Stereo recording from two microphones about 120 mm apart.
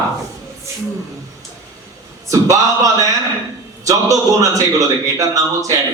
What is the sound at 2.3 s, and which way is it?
Speech, 25° right (ahead or behind).